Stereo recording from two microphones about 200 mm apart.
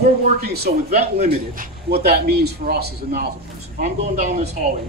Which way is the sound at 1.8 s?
50° right (ahead or behind).